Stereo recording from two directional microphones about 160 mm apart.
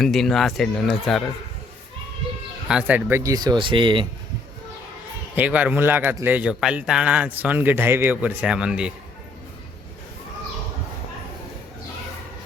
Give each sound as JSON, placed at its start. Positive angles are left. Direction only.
{"t": 0.0, "sound": "speech", "side_deg": 0}
{"t": 2.6, "sound": "speech", "side_deg": -10}
{"t": 5.3, "sound": "a man's voice", "side_deg": -10}